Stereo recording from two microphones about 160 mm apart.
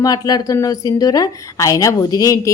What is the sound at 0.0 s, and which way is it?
A woman's voice, 25° left (ahead or behind).